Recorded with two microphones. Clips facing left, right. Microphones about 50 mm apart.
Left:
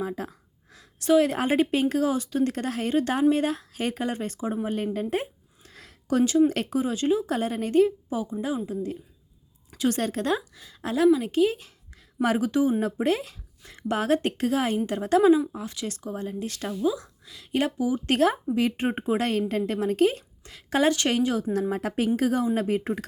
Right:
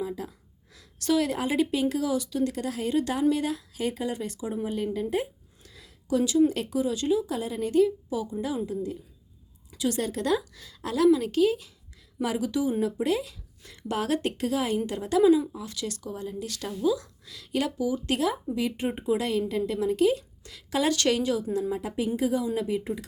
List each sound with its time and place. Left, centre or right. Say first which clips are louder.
0.0 s a sound: left 2 dB; left
1.3 s a woman's voice: left 3 dB; left
4.9 s a sound: even; left
6.5 s a woman's voice: left 1 dB; left
7.3 s a woman's voice: left 3 dB; left
8.7 s a woman's voice: left 1 dB; left
10.5 s a woman's voice: left 2 dB; left
12.2 s a woman's voice: left 4 dB; left
15.2 s a woman's voice: right 1 dB; left
18.0 s a woman's voice: left 4 dB; left
21.6 s speech: left 3 dB; left